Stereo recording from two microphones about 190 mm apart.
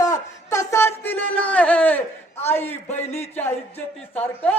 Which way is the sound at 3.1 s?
35° left (ahead or behind).